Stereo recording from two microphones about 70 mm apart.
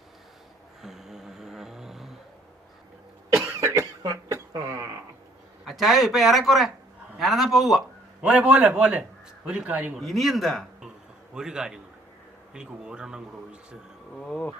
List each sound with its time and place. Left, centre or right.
0.8 s a sound: centre
3.4 s cough: right
5.6 s speech: centre
8.2 s speech: centre
9.9 s speech: centre
14.2 s speech: centre